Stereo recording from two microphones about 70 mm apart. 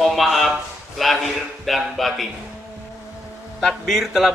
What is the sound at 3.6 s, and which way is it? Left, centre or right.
Speech, centre.